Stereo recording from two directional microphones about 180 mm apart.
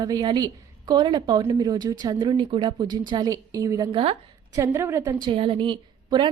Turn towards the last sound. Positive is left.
turn(degrees=-25)  # may be behind; listen again after turning